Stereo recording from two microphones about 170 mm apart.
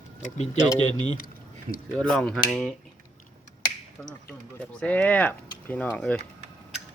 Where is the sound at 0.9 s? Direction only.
25° right (ahead or behind).